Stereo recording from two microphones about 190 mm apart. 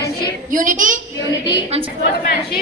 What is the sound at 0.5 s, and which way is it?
Speech, 45° right (ahead or behind).